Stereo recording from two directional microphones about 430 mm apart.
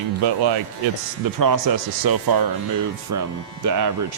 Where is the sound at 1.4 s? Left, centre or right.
Right.